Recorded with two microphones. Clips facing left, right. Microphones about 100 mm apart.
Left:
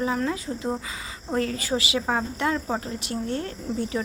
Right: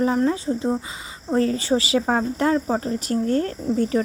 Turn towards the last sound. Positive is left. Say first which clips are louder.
# right 7 dB
turn(degrees=-45)  # may be behind; listen again after turning